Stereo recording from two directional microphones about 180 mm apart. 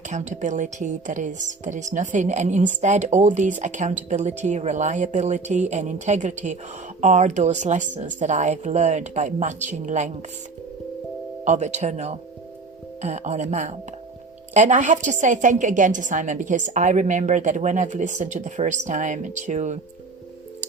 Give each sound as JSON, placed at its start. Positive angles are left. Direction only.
{"t": 0.1, "sound": "a woman's voice", "side_deg": -40}
{"t": 11.4, "sound": "a woman's voice", "side_deg": -40}